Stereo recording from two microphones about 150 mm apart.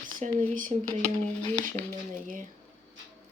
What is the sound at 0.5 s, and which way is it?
Speech, 60° right (ahead or behind).